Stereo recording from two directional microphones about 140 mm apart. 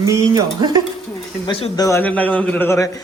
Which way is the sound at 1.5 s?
45° left (ahead or behind).